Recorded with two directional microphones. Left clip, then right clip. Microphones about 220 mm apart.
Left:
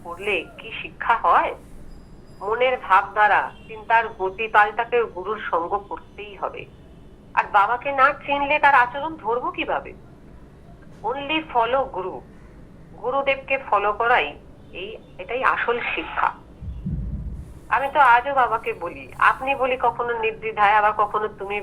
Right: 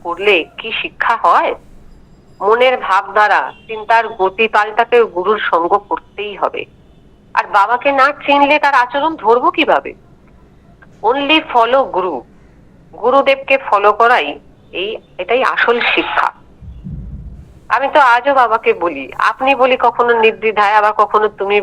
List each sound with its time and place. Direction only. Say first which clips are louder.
0.0 s a man's voice: right 12 dB; 55° right (ahead or behind)
11.0 s a man's voice: right 13 dB; 55° right (ahead or behind)
17.7 s a man's voice: right 6 dB; 55° right (ahead or behind)